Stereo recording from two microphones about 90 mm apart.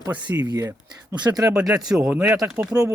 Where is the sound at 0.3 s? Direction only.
45° right (ahead or behind).